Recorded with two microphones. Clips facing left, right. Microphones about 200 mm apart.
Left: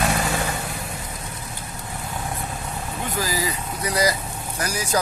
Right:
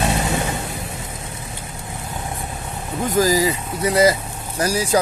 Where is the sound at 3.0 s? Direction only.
45° right (ahead or behind).